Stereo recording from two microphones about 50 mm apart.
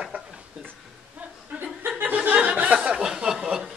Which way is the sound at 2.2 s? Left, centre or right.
Right.